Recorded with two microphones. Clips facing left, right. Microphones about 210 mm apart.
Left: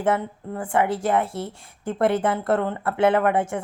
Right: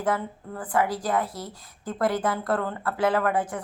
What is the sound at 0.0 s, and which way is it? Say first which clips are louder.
Speech: left 4 dB; 25° left (ahead or behind).